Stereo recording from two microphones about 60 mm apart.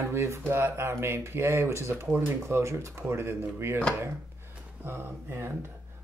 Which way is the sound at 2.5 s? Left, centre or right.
Right.